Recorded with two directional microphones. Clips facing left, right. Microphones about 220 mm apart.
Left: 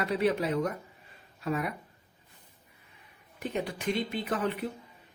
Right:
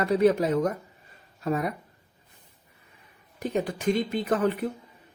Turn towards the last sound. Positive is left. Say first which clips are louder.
# right 6 dB
turn(degrees=-45)  # may be behind; listen again after turning